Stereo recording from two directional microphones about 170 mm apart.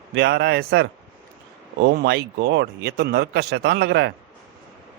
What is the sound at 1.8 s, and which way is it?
Speech, 85° right.